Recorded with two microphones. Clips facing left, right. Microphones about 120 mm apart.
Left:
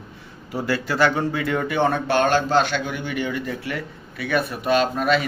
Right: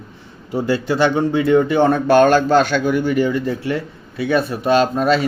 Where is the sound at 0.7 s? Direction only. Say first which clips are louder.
Right 3 dB; 20° right (ahead or behind).